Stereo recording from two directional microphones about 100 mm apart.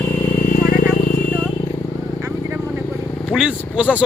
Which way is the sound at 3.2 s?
5° right (ahead or behind).